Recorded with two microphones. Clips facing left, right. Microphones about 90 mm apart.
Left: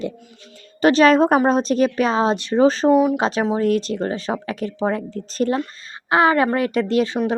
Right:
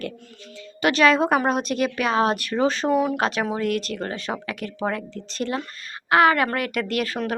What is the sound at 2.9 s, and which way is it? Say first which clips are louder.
Speech: left 5 dB; 10° left (ahead or behind).